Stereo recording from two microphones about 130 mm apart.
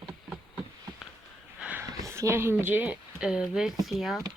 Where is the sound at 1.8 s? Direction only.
25° right (ahead or behind); by 4.2 s centre (ahead or behind).